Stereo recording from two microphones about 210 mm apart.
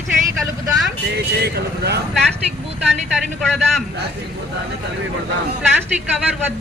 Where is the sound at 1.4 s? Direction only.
50° right (ahead or behind).